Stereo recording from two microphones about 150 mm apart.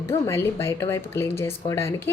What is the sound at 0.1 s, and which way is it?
Speech, 20° left (ahead or behind).